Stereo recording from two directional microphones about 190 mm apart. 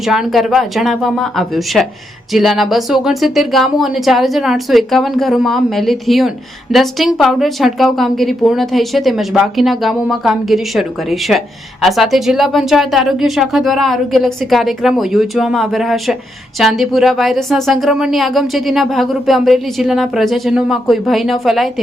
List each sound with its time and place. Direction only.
0.0 s speech: centre (ahead or behind)